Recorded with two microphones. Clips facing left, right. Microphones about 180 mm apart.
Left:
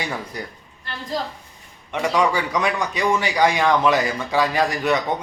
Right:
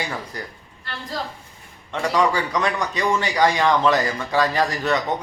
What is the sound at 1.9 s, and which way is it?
A man's voice, 15° left (ahead or behind).